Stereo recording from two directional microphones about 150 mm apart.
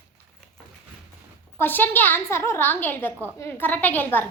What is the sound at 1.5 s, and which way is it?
A woman's voice, 15° left (ahead or behind).